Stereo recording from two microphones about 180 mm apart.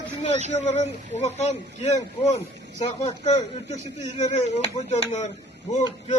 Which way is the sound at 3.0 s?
40° left (ahead or behind).